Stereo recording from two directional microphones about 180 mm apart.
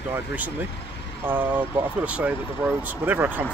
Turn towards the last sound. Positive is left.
turn(degrees=-10)  # may be behind; listen again after turning